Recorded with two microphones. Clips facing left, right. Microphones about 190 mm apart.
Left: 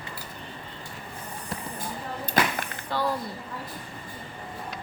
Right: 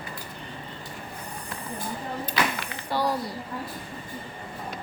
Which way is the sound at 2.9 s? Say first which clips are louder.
Right 2 dB; 10° right (ahead or behind).